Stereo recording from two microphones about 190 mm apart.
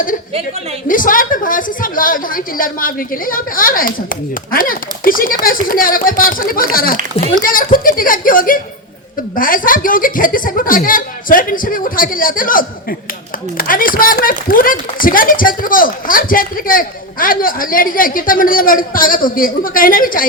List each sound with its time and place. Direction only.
0.9 s speech: 45° left (ahead or behind)